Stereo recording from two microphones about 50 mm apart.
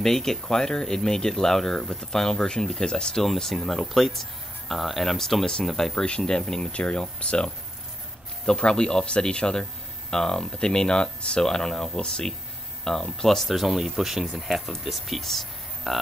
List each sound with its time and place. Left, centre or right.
0.0 s speech: centre